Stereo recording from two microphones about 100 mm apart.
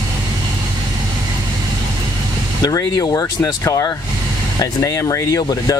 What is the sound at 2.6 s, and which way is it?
Speech, 35° left (ahead or behind).